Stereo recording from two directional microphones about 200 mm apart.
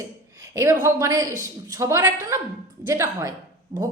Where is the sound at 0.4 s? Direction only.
15° right (ahead or behind).